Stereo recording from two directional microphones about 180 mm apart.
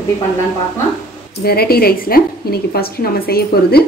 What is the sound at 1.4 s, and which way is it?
A woman's voice, 60° left (ahead or behind).